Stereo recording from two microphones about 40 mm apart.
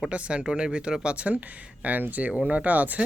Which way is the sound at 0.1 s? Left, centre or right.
Right.